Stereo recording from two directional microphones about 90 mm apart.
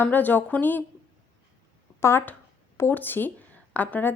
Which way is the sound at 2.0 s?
25° left (ahead or behind).